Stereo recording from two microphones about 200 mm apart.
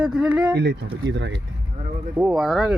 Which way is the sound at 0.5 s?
60° right (ahead or behind).